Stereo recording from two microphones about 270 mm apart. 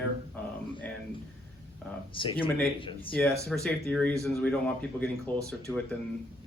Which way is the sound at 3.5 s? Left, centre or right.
Centre.